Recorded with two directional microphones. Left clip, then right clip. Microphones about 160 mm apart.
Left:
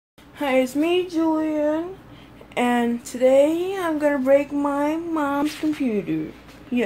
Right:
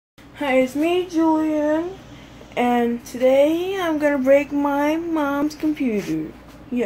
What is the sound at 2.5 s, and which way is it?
Speech, 25° left (ahead or behind).